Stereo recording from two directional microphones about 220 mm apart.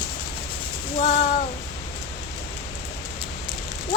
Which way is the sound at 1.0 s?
35° left (ahead or behind).